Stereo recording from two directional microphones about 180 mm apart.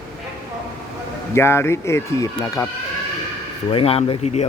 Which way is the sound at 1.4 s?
15° left (ahead or behind).